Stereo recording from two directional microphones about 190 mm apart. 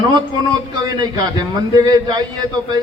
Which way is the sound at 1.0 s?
20° right (ahead or behind).